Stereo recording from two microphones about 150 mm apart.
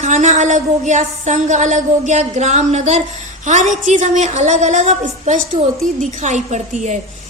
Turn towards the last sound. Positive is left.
turn(degrees=-55)  # may be behind; listen again after turning